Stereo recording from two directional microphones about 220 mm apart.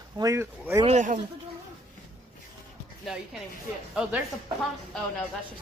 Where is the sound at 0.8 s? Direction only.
30° right (ahead or behind).